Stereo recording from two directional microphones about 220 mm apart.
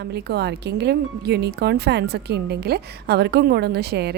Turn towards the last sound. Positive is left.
turn(degrees=-50)  # may be behind; listen again after turning